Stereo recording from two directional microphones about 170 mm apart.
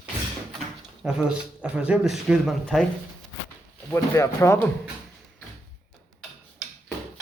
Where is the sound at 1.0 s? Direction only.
5° right (ahead or behind).